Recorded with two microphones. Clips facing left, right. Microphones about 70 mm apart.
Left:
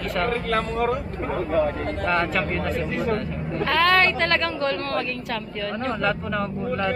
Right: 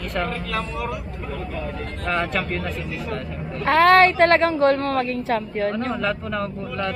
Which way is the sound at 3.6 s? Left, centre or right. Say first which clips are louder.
Right 5 dB; right.